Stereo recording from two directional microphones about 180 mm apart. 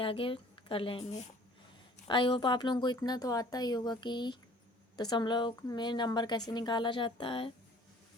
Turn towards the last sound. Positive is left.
turn(degrees=30)  # may be behind; listen again after turning